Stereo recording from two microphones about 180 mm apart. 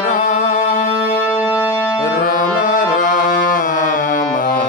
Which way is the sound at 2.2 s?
50° left (ahead or behind).